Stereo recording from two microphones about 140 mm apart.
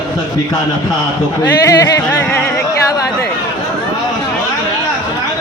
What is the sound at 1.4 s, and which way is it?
Speech, 25° left (ahead or behind).